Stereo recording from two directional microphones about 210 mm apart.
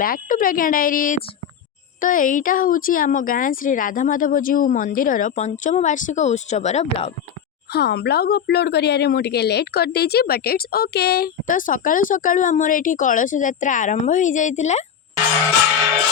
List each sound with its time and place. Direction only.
0.0 s a woman's voice: 40° left (ahead or behind)
7.7 s a woman's voice: 50° left (ahead or behind); by 14.8 s 35° left (ahead or behind)